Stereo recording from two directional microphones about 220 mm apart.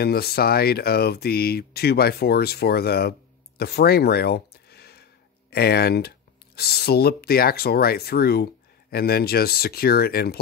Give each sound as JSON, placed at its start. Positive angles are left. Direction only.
{"t": 0.0, "sound": "speech", "side_deg": 45}